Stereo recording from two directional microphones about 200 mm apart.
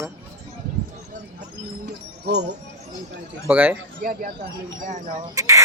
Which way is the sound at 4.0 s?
45° right (ahead or behind).